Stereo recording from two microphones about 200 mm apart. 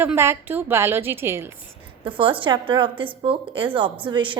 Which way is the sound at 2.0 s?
25° right (ahead or behind).